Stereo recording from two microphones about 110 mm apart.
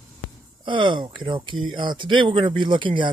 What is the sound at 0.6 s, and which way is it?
A man's voice, 50° right (ahead or behind).